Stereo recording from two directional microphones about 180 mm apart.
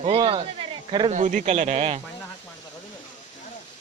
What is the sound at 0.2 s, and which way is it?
Speech, 30° right (ahead or behind).